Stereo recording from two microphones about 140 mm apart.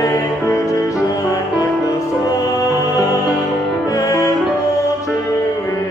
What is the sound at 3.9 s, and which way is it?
Music, 25° left (ahead or behind).